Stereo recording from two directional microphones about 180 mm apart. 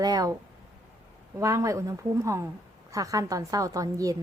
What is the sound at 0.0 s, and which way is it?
Speech, 20° right (ahead or behind).